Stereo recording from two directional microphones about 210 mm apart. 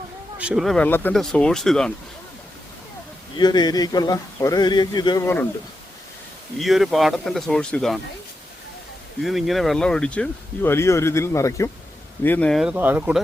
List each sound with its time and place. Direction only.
0.3 s speech: 5° right (ahead or behind)
3.3 s speech: 20° left (ahead or behind)
6.6 s speech: centre (ahead or behind)
9.2 s speech: centre (ahead or behind)